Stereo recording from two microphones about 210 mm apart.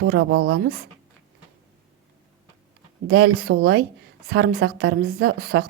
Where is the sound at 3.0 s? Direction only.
55° right (ahead or behind).